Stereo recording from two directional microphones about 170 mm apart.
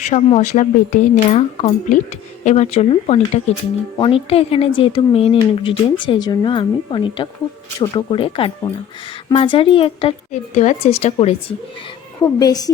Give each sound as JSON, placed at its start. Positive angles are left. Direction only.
{"t": 0.0, "sound": "speech", "side_deg": 40}
{"t": 12.2, "sound": "a woman's voice", "side_deg": 20}